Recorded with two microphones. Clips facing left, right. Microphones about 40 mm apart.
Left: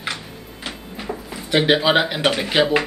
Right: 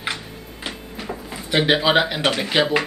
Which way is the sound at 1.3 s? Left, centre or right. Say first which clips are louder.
Left 1 dB; centre.